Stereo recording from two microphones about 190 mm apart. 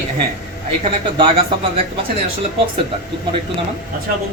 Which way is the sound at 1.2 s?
30° right (ahead or behind).